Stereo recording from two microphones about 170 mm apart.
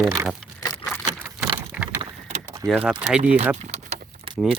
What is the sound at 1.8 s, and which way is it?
Vehicle, 10° right (ahead or behind).